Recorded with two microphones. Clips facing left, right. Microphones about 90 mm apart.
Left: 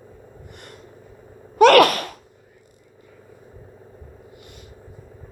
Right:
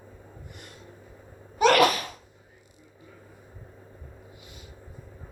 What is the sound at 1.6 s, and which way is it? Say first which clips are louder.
Sneeze: left 7 dB; 60° left (ahead or behind).